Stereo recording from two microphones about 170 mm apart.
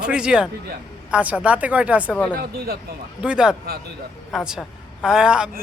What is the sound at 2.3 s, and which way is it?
Speech, 65° right (ahead or behind).